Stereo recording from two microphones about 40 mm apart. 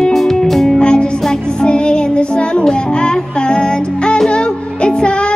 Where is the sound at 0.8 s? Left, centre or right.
Left.